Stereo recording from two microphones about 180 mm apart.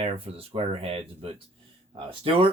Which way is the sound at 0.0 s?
30° right (ahead or behind).